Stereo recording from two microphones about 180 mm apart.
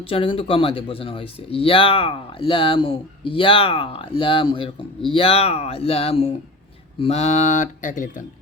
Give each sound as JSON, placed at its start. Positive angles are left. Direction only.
{"t": 0.0, "sound": "speech", "side_deg": 30}